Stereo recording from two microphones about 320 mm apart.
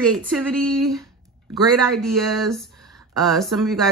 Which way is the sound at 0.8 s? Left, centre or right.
Centre.